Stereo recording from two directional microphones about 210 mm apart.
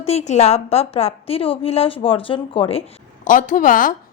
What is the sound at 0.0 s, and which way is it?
A woman's voice, 30° left (ahead or behind).